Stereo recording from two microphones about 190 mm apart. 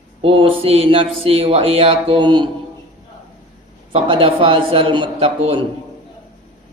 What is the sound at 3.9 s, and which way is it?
Speech, 30° right (ahead or behind).